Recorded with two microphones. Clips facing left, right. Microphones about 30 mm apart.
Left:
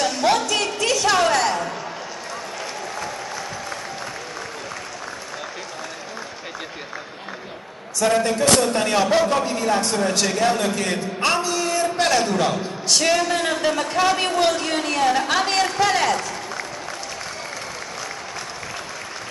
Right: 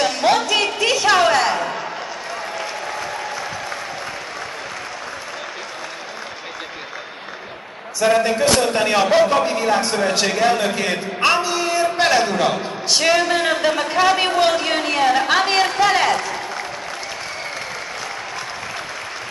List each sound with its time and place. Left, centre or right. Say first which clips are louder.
0.2 s music: right 3 dB; right
8.0 s a man's voice: right 3 dB; centre